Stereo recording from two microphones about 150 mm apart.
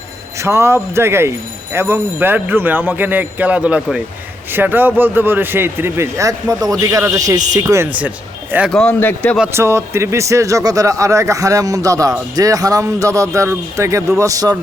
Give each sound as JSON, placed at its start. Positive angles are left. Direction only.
{"t": 0.3, "sound": "a man's voice", "side_deg": -20}
{"t": 8.7, "sound": "speech", "side_deg": 5}
{"t": 9.5, "sound": "speech", "side_deg": -15}